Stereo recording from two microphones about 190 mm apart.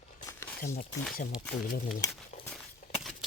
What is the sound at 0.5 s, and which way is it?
Speech, 50° left (ahead or behind).